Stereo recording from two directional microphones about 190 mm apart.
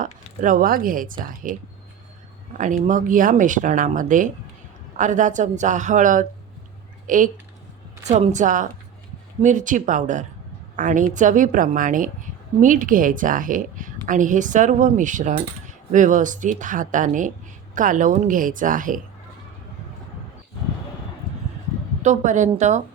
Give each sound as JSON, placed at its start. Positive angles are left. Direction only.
{"t": 0.0, "sound": "a woman's voice", "side_deg": -45}
{"t": 22.0, "sound": "speech", "side_deg": -40}